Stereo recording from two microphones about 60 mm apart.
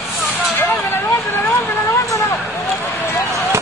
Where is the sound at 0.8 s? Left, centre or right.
Left.